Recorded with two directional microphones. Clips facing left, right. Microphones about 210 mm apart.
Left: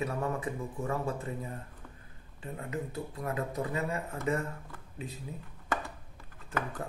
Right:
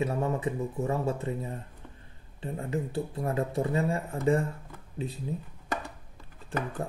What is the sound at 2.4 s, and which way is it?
Speech, 30° right (ahead or behind).